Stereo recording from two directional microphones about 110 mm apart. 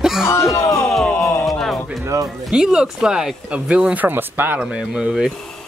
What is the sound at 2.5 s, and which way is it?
Speech, 5° right (ahead or behind).